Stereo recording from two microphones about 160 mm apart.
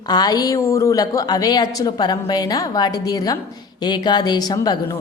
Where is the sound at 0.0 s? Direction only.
25° left (ahead or behind).